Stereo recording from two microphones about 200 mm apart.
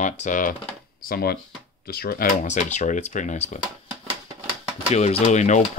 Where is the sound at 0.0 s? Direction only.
40° left (ahead or behind).